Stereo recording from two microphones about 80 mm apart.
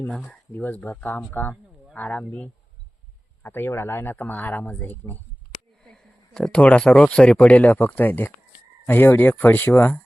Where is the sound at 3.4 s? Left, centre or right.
Left.